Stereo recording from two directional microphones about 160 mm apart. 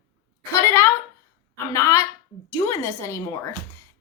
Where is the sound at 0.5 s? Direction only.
20° left (ahead or behind).